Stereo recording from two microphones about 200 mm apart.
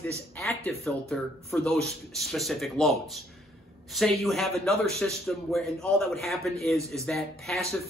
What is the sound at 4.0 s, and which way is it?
A man's voice, centre (ahead or behind).